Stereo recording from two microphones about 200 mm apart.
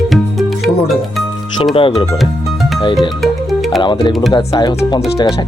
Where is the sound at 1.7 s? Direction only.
25° left (ahead or behind).